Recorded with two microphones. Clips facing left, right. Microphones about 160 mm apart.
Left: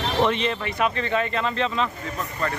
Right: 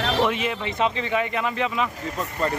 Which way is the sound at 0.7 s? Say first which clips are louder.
Right 3 dB; 20° right (ahead or behind).